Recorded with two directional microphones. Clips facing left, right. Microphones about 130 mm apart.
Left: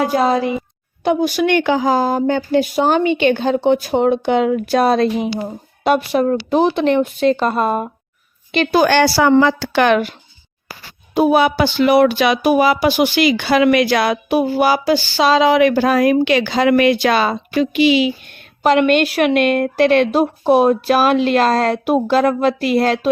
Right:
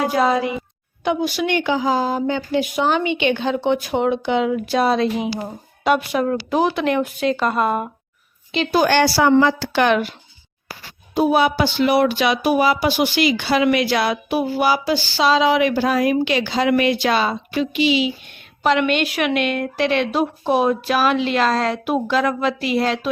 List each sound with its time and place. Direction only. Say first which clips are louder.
0.1 s speech: left 2 dB; 35° left (ahead or behind)
1.0 s a woman's voice: left 5 dB; 45° left (ahead or behind)
8.5 s a woman's voice: left 3 dB; 70° left (ahead or behind)
11.1 s speech: left 3 dB; 65° left (ahead or behind)
14.3 s a woman's voice: left 4 dB; 50° left (ahead or behind)
18.6 s a woman's voice: left 5 dB; 45° left (ahead or behind)